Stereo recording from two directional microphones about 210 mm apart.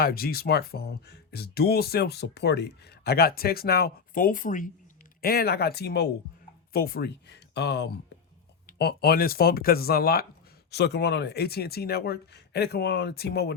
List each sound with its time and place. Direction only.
0.0 s speech: 45° left (ahead or behind)